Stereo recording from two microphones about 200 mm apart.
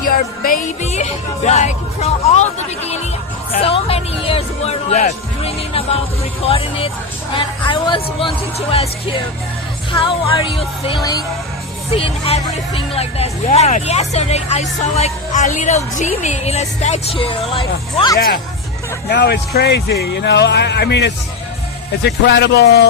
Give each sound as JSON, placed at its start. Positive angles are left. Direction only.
{"t": 0.1, "sound": "speech", "side_deg": 45}
{"t": 19.0, "sound": "speech", "side_deg": 55}